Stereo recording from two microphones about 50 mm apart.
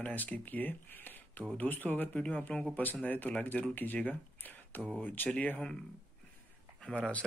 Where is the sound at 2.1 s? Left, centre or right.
Left.